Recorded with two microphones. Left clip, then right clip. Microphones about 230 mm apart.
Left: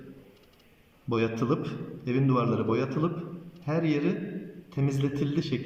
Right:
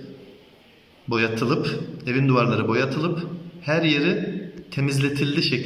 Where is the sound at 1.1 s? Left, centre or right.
Right.